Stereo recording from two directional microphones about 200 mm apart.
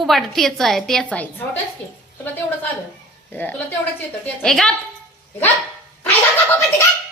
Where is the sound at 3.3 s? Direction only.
10° left (ahead or behind).